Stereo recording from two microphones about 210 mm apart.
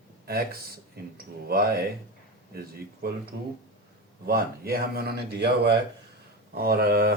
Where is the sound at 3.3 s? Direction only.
60° right (ahead or behind).